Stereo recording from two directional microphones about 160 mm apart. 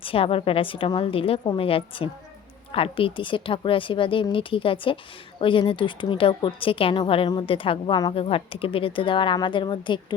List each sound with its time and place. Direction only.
0.0 s a woman's voice: 35° left (ahead or behind)